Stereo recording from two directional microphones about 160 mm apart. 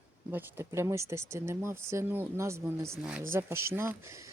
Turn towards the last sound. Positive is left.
turn(degrees=-20)  # may be behind; listen again after turning